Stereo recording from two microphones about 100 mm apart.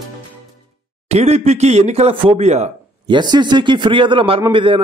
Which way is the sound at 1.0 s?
90° right.